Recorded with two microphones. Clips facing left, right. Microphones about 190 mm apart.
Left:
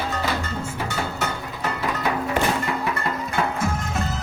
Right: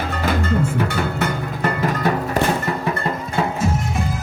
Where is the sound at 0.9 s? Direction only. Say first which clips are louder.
Right 5 dB; 55° right (ahead or behind).